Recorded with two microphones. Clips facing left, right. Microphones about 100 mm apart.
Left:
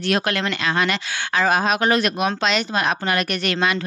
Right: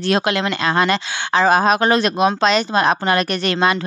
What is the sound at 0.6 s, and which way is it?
Speech, 35° right (ahead or behind).